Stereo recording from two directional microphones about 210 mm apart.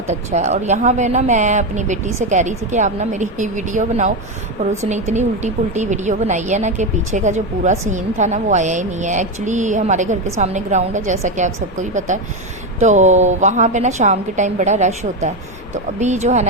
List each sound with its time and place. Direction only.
0.1 s a woman's voice: 35° right (ahead or behind)